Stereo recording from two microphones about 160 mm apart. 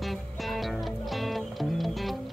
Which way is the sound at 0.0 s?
Centre (ahead or behind).